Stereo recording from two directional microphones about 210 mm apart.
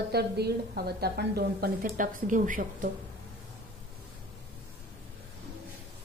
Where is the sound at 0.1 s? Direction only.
50° right (ahead or behind).